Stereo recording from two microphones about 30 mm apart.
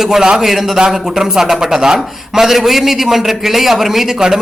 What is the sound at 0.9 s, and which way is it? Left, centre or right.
A man's voice, centre.